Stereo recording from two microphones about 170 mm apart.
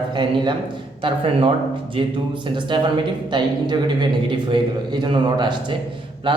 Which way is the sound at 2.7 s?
30° right (ahead or behind).